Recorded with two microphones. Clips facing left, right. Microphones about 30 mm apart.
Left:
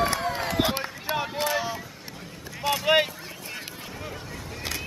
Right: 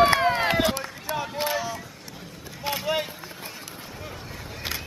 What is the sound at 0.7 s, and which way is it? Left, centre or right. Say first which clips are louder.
Run: left 1 dB; left.